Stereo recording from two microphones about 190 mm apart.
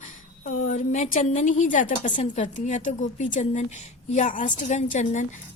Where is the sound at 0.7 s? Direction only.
40° left (ahead or behind).